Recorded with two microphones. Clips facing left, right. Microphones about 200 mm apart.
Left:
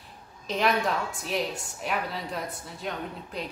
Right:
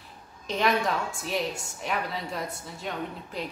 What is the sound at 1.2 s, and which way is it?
A woman's voice, centre (ahead or behind).